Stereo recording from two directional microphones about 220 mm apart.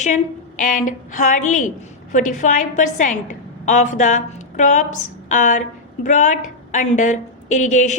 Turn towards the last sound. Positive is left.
turn(degrees=35)  # may be behind; listen again after turning